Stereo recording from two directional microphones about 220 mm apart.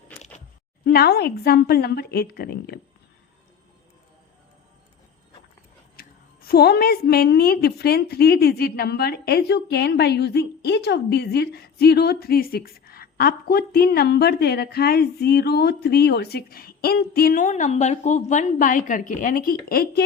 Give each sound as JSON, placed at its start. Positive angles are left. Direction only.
{"t": 0.9, "sound": "a woman's voice", "side_deg": 45}
{"t": 6.0, "sound": "a woman's voice", "side_deg": 45}